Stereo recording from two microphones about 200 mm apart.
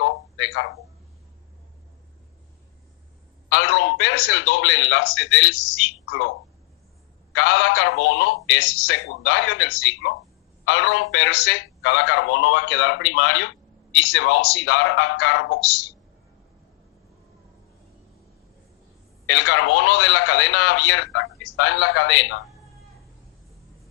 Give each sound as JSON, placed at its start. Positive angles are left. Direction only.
{"t": 0.0, "sound": "a sound", "side_deg": 70}
{"t": 3.5, "sound": "a man's voice", "side_deg": 75}
{"t": 7.3, "sound": "a man's voice", "side_deg": 75}
{"t": 19.3, "sound": "a man's voice", "side_deg": 70}